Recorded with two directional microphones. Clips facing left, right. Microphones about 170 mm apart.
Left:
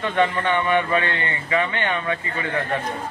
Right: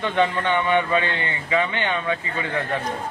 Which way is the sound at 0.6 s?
20° right (ahead or behind).